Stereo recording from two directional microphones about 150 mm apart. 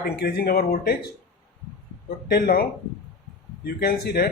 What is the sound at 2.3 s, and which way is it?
Speech, 90° left.